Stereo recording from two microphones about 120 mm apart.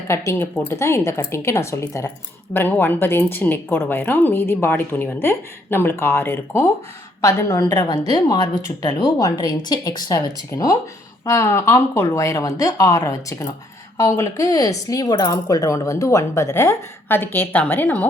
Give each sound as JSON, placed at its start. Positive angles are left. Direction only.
{"t": 0.1, "sound": "speech", "side_deg": 20}